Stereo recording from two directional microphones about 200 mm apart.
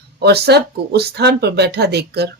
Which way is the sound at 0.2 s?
55° right (ahead or behind).